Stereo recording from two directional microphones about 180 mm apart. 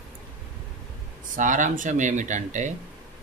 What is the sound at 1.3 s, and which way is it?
Speech, 45° right (ahead or behind).